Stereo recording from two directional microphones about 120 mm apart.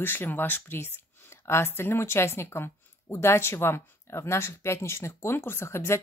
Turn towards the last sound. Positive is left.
turn(degrees=20)  # may be behind; listen again after turning